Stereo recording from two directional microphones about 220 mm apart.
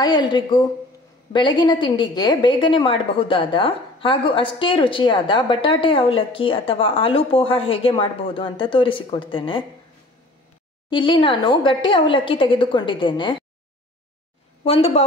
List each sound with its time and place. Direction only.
0.0 s a woman's voice: 20° left (ahead or behind)
10.9 s a woman's voice: 20° left (ahead or behind)
14.6 s a woman's voice: 25° left (ahead or behind)